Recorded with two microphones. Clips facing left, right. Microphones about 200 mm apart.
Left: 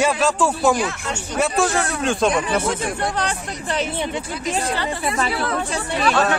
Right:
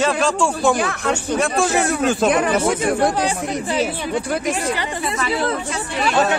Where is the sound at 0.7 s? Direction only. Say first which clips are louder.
Right 3 dB; 55° right (ahead or behind).